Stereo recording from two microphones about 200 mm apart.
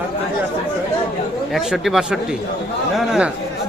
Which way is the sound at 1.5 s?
Centre (ahead or behind).